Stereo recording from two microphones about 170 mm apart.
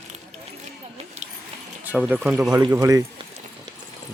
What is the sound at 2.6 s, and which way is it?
Speech, 20° right (ahead or behind).